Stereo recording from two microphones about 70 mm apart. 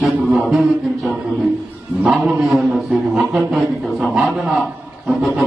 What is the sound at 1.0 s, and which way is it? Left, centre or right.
Speech, centre.